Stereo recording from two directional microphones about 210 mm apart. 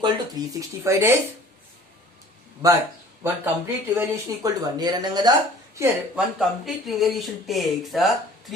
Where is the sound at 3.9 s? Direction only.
15° right (ahead or behind).